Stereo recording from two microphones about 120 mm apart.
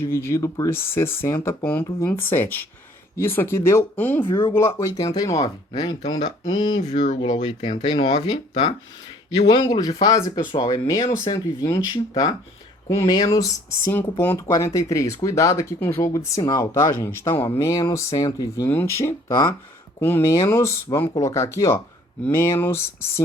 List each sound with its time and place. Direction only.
0.0 s speech: 20° left (ahead or behind)
4.2 s speech: 40° left (ahead or behind)
4.5 s speech: 25° left (ahead or behind); by 6.8 s 40° left (ahead or behind)
6.8 s speech: 90° left
7.3 s speech: 40° left (ahead or behind)
7.7 s speech: 65° left (ahead or behind)
7.9 s speech: 40° left (ahead or behind)
13.9 s speech: 15° left (ahead or behind)